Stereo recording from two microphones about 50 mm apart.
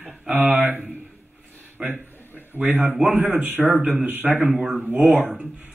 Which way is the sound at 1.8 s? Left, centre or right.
Right.